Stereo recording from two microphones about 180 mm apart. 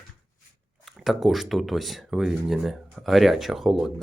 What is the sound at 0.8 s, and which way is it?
Speech, centre (ahead or behind).